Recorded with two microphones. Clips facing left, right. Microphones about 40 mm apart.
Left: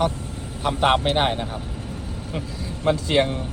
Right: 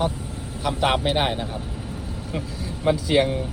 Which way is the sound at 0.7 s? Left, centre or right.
Left.